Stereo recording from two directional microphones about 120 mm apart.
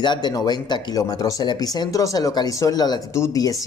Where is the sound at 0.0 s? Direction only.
40° left (ahead or behind).